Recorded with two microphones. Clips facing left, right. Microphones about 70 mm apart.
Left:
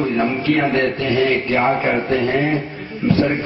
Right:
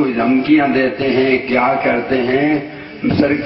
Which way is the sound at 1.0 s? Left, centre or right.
Right.